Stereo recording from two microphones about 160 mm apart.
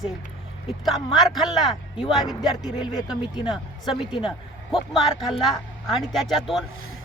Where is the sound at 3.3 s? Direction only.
30° left (ahead or behind).